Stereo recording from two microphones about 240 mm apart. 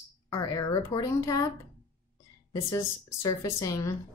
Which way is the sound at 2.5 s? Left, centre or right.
Centre.